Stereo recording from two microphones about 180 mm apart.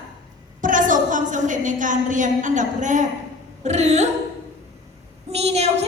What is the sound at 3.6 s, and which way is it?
Speech, 40° right (ahead or behind).